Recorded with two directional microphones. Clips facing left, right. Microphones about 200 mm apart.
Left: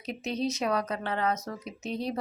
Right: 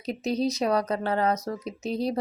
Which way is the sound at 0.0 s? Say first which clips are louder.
Right 5 dB; 35° right (ahead or behind).